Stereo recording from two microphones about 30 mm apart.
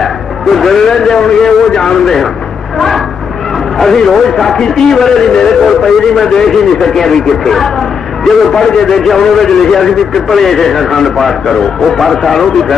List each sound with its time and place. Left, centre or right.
0.0 s a man's voice: centre
3.7 s a man's voice: centre
5.6 s a man's voice: centre
12.4 s speech: centre